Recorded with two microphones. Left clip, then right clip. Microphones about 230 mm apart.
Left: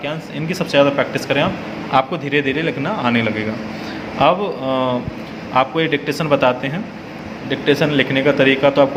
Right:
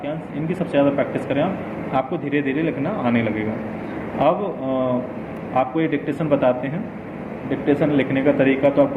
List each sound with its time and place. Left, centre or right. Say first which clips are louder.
0.7 s a man's voice: left 5 dB; left